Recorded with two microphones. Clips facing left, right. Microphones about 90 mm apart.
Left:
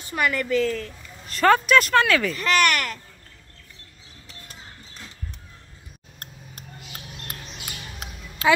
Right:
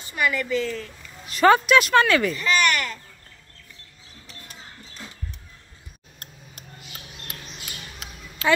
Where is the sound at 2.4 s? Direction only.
60° left (ahead or behind).